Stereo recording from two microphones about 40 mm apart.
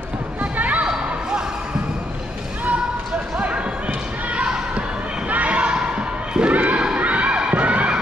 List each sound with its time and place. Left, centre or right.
0.4 s basketball bounce: right
3.3 s basketball bounce: right
5.3 s basketball bounce: right
6.5 s a sound: right
7.0 s children shouting: right